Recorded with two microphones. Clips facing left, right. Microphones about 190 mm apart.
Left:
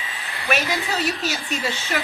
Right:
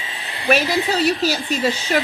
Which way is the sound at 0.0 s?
30° right (ahead or behind).